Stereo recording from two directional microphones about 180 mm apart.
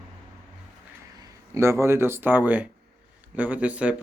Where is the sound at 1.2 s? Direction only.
15° right (ahead or behind).